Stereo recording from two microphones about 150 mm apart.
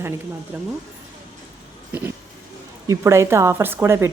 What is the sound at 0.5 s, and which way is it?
Speech, 15° right (ahead or behind).